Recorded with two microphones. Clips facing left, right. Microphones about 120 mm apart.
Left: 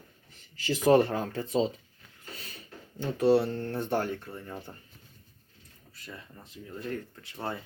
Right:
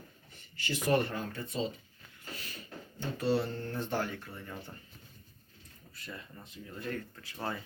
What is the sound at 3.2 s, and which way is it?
Speech, 60° left (ahead or behind).